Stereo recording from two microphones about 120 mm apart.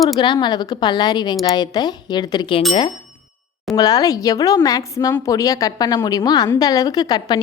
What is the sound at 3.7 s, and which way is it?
A woman's voice, 30° left (ahead or behind).